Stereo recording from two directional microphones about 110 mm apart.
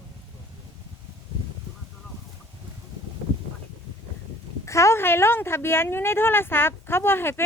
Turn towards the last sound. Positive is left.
turn(degrees=20)  # may be behind; listen again after turning